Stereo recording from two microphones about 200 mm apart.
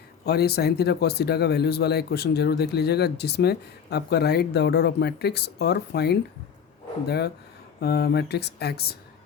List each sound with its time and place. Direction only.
0.3 s speech: 55° left (ahead or behind)
7.8 s speech: 50° left (ahead or behind)